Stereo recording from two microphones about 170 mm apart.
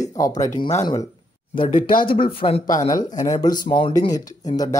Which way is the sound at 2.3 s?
35° left (ahead or behind).